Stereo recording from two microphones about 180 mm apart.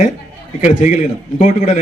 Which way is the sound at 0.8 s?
45° left (ahead or behind).